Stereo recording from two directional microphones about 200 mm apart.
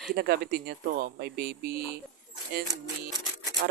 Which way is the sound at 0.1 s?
50° right (ahead or behind).